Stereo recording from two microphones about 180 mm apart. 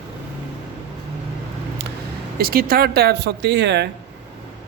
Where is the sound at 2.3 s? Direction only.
55° right (ahead or behind).